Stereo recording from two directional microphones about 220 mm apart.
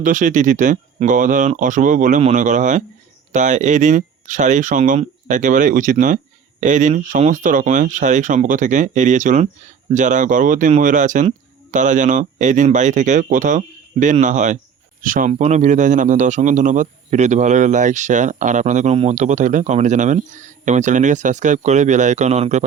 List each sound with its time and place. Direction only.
0.0 s speech: 35° right (ahead or behind)